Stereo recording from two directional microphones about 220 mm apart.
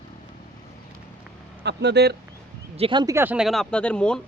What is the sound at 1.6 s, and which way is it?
Speech, 50° right (ahead or behind).